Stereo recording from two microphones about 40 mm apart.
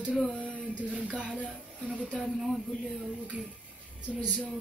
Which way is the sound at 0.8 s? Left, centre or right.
Right.